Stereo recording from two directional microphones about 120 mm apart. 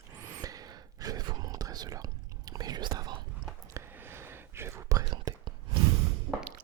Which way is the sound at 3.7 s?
20° right (ahead or behind).